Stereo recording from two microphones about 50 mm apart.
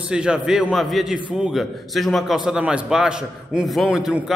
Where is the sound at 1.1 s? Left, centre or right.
Right.